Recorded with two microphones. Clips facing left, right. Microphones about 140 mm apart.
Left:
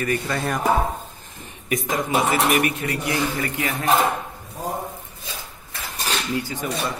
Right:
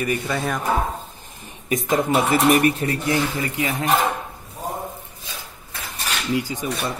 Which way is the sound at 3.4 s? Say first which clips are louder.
Right 1 dB; 20° right (ahead or behind).